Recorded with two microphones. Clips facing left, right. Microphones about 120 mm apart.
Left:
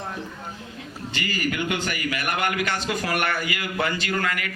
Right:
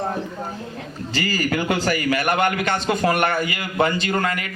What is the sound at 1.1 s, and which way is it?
A man's voice, 35° right (ahead or behind).